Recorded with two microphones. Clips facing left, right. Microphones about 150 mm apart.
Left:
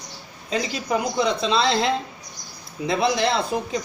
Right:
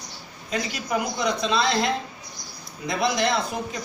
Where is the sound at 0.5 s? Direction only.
30° left (ahead or behind).